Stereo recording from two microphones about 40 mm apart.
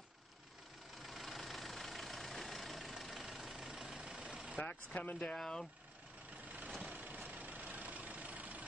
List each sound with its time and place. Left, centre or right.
0.9 s vehicle: centre
4.6 s speech: left
5.2 s speech: centre
6.9 s vehicle: right